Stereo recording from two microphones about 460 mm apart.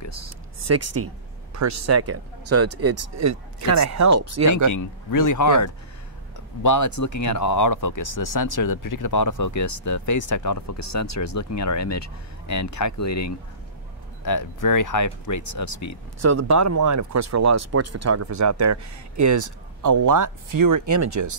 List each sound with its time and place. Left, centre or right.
0.6 s speech: right
4.7 s speech: left
16.2 s speech: right